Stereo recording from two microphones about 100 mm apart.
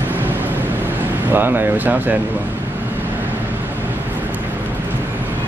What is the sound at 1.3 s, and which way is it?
Speech, 20° right (ahead or behind).